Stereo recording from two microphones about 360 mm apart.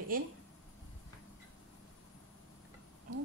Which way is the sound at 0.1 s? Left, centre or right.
Right.